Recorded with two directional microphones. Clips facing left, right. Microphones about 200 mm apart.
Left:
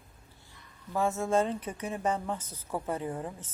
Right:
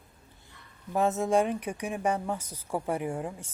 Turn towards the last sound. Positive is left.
turn(degrees=-10)  # may be behind; listen again after turning